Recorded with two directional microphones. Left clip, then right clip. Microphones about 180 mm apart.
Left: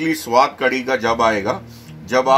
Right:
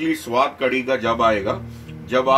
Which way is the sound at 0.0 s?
35° left (ahead or behind).